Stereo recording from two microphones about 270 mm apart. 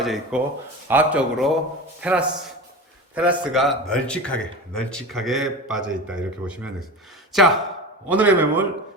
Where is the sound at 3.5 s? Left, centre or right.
Centre.